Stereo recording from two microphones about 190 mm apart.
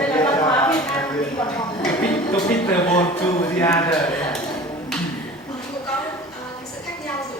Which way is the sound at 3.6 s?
20° left (ahead or behind).